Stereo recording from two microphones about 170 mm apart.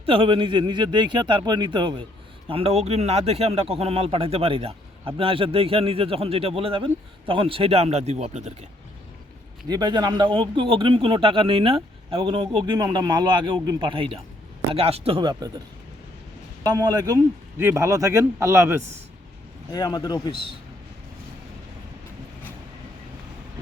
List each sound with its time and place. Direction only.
0.0 s a man's voice: 30° right (ahead or behind)
9.6 s a man's voice: 25° right (ahead or behind)
16.6 s a man's voice: 25° right (ahead or behind)
19.7 s speech: 25° left (ahead or behind)